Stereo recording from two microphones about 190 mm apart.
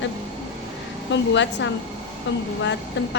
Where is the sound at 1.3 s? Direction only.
70° left (ahead or behind).